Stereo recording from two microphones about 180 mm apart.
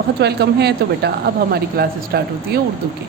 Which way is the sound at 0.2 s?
65° right (ahead or behind).